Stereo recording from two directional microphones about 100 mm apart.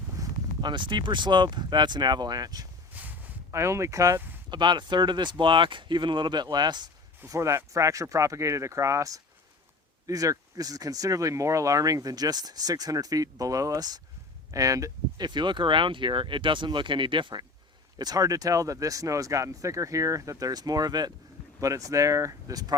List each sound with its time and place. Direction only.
0.2 s a sound: 35° right (ahead or behind)
0.6 s speech: 50° right (ahead or behind)
2.9 s a sound: 15° right (ahead or behind)
3.5 s speech: 30° right (ahead or behind)
4.4 s speech: 45° right (ahead or behind)
7.3 s speech: 30° right (ahead or behind)
15.3 s speech: 50° right (ahead or behind)
17.9 s speech: 40° right (ahead or behind)